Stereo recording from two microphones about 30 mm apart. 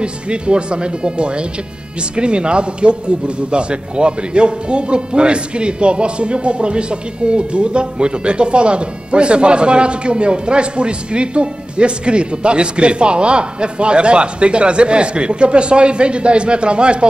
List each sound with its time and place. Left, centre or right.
0.0 s speech: right